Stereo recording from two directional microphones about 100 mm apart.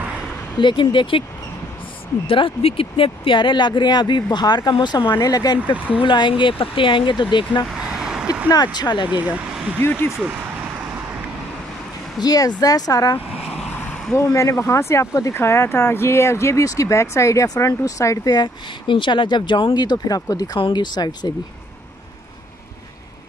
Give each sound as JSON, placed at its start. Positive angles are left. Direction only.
{"t": 0.6, "sound": "speech", "side_deg": 50}
{"t": 2.2, "sound": "speech", "side_deg": 65}
{"t": 5.2, "sound": "speech", "side_deg": 40}
{"t": 5.9, "sound": "speech", "side_deg": 55}
{"t": 7.9, "sound": "vehicle", "side_deg": -10}
{"t": 8.7, "sound": "speech", "side_deg": 45}
{"t": 9.0, "sound": "speech", "side_deg": -15}
{"t": 9.8, "sound": "speech", "side_deg": 20}
{"t": 12.2, "sound": "speech", "side_deg": 40}
{"t": 20.5, "sound": "speech", "side_deg": 50}